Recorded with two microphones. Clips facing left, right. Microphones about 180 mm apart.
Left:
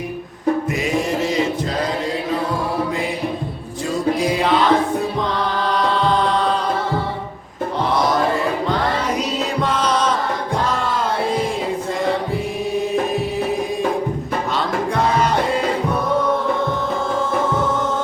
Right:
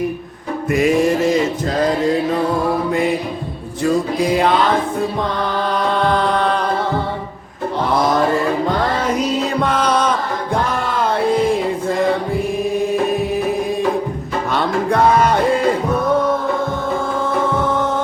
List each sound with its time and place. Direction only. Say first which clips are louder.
6.1 s music: right 1 dB; 60° right (ahead or behind)
9.6 s music: right 1 dB; 55° right (ahead or behind)
14.5 s music: right 5 dB; 60° right (ahead or behind)